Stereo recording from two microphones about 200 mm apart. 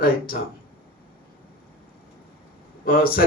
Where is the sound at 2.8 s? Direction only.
45° left (ahead or behind).